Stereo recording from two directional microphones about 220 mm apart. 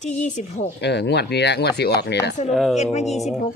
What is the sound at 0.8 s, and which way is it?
Speech, 50° left (ahead or behind).